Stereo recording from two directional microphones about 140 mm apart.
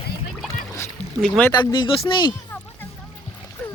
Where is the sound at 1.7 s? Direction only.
35° left (ahead or behind).